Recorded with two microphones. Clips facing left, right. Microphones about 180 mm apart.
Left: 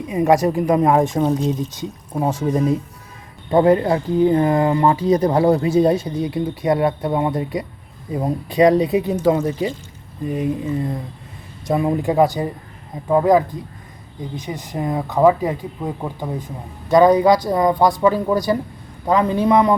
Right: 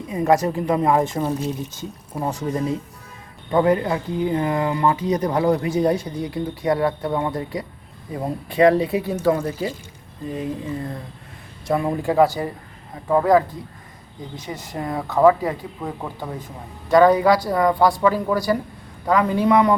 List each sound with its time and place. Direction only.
0.1 s speech: 20° left (ahead or behind)
3.5 s speech: 30° left (ahead or behind)
11.6 s speech: 20° left (ahead or behind)